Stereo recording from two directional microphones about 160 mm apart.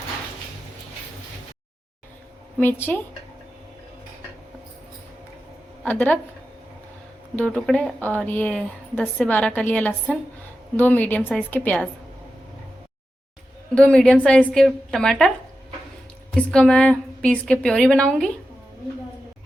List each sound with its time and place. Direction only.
2.6 s a woman's voice: 10° left (ahead or behind)
5.8 s a woman's voice: 10° left (ahead or behind)
7.3 s a woman's voice: 5° left (ahead or behind)
13.7 s a woman's voice: 5° left (ahead or behind)
16.3 s a woman's voice: 5° left (ahead or behind)